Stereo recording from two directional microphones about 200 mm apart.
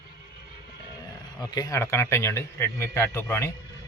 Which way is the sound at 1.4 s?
20° left (ahead or behind).